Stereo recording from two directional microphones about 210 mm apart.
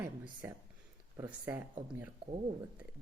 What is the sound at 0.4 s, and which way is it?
Speech, 10° right (ahead or behind).